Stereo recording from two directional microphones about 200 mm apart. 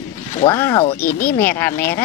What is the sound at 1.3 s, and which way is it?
Speech, 10° left (ahead or behind).